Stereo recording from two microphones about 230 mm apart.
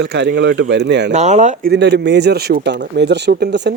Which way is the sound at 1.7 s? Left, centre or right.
Right.